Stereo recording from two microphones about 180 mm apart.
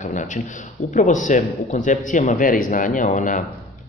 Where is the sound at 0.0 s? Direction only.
45° left (ahead or behind).